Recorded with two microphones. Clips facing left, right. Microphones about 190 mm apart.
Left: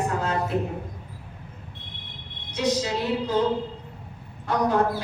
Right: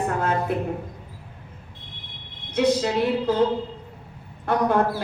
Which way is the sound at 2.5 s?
55° right (ahead or behind).